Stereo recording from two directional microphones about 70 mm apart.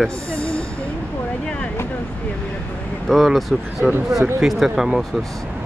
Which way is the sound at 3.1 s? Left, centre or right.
Centre.